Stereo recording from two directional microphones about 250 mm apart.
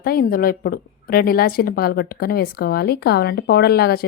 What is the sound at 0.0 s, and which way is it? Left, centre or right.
A woman's voice, left.